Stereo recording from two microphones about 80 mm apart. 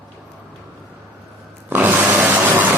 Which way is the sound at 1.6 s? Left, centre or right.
Right.